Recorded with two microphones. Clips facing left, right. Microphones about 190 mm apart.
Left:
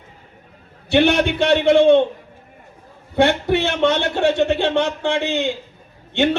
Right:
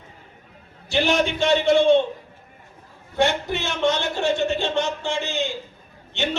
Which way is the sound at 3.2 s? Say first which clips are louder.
Left 6 dB; 60° left (ahead or behind).